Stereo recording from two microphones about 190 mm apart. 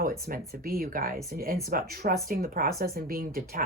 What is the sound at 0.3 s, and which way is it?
Speech, 50° right (ahead or behind).